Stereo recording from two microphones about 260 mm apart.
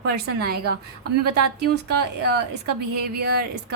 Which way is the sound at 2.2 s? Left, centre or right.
Right.